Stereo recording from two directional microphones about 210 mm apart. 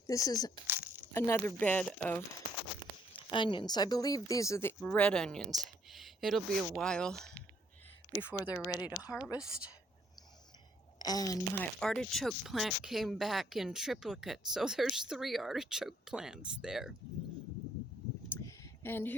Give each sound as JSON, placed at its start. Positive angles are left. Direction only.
{"t": 0.1, "sound": "speech", "side_deg": 15}
{"t": 3.2, "sound": "speech", "side_deg": 20}
{"t": 11.0, "sound": "speech", "side_deg": 20}
{"t": 18.3, "sound": "a sound", "side_deg": 10}